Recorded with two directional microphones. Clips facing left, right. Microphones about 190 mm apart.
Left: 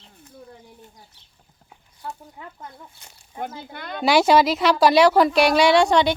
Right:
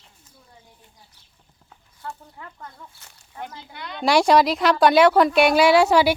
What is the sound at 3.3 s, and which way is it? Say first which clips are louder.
Speech: left 4 dB; 50° left (ahead or behind).